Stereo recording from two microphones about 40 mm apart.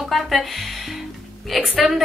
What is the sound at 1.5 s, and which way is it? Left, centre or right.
Speech, centre.